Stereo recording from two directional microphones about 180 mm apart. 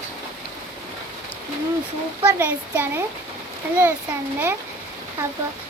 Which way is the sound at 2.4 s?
10° right (ahead or behind).